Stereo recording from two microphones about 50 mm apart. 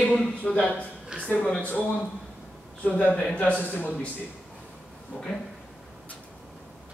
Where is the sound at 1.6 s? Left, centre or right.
Left.